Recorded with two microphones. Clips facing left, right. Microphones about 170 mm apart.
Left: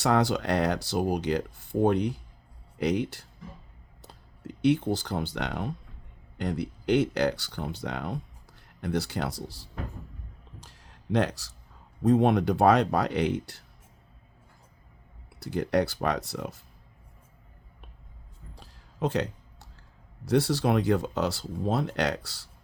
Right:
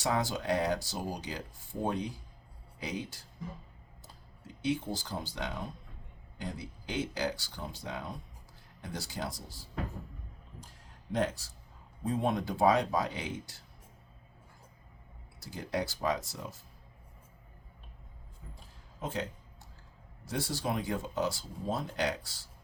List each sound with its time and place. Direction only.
0.0 s speech: 70° left (ahead or behind)
15.4 s speech: 65° left (ahead or behind)
18.5 s a sound: 75° left (ahead or behind)
20.2 s speech: 70° left (ahead or behind)